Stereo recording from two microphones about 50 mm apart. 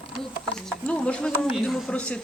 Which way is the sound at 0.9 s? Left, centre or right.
Left.